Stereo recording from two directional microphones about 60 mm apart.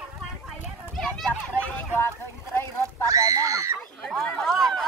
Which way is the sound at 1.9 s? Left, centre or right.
Left.